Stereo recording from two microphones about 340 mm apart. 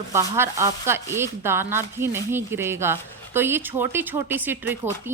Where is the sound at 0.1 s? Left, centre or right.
Centre.